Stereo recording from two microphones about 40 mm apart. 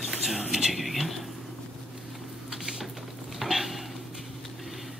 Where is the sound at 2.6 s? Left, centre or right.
Centre.